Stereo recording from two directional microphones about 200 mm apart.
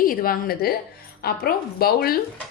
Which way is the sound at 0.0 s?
45° left (ahead or behind).